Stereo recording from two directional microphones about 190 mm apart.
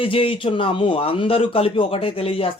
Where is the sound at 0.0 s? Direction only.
30° left (ahead or behind).